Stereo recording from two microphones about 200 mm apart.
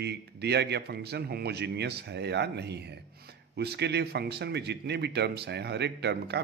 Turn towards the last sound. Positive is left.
turn(degrees=-55)  # may be behind; listen again after turning